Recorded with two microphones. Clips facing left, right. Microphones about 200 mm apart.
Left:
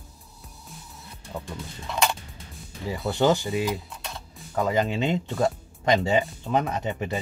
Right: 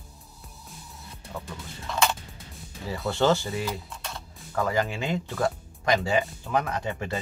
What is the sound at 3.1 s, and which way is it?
Speech, 15° left (ahead or behind).